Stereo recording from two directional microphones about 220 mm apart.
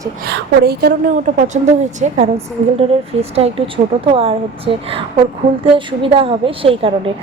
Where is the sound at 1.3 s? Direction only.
30° right (ahead or behind).